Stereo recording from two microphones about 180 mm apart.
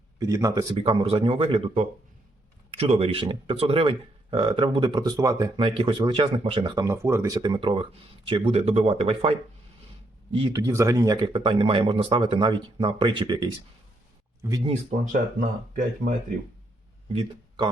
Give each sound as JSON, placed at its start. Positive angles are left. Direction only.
{"t": 0.2, "sound": "speech", "side_deg": -20}
{"t": 14.8, "sound": "speech", "side_deg": -45}
{"t": 17.1, "sound": "speech", "side_deg": -30}